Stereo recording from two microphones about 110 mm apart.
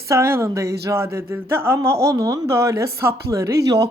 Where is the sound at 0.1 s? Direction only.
25° right (ahead or behind).